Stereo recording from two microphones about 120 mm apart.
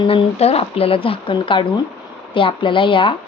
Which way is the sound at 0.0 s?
55° left (ahead or behind).